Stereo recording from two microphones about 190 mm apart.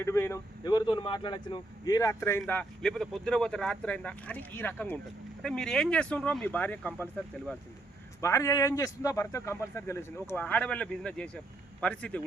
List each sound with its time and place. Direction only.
0.0 s speech: 15° left (ahead or behind)
8.2 s a man's voice: 15° left (ahead or behind)